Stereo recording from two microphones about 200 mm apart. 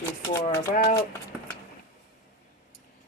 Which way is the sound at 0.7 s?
45° left (ahead or behind).